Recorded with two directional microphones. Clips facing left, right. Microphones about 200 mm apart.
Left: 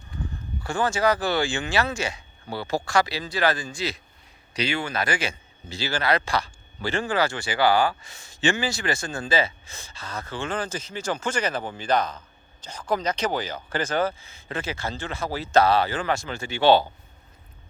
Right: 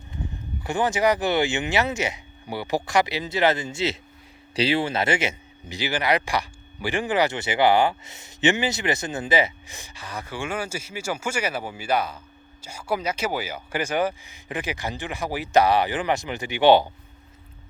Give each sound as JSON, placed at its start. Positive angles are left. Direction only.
{"t": 0.1, "sound": "speech", "side_deg": -20}